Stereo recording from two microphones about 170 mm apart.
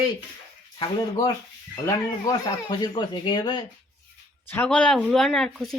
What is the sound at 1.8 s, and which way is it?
Speech, 20° left (ahead or behind).